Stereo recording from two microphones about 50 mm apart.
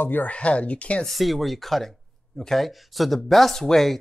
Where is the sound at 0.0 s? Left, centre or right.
Left.